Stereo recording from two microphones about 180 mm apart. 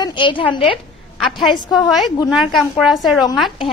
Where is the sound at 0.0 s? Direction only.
25° left (ahead or behind).